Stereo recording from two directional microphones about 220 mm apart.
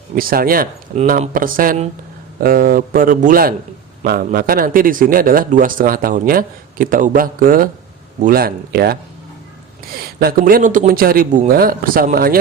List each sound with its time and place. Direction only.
0.2 s speech: 40° right (ahead or behind)